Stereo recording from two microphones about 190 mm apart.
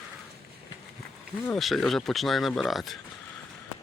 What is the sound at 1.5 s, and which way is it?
Speech, centre (ahead or behind).